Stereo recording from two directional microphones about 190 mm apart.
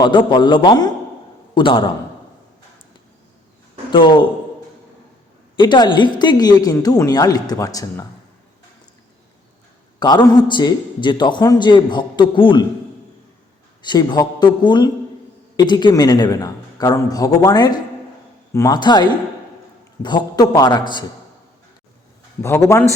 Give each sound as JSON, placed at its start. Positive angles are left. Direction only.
{"t": 0.0, "sound": "a man's voice", "side_deg": 25}
{"t": 3.9, "sound": "a man's voice", "side_deg": 25}
{"t": 5.5, "sound": "a man's voice", "side_deg": 25}
{"t": 10.0, "sound": "a man's voice", "side_deg": 20}
{"t": 13.8, "sound": "a man's voice", "side_deg": 25}
{"t": 22.4, "sound": "a man's voice", "side_deg": 15}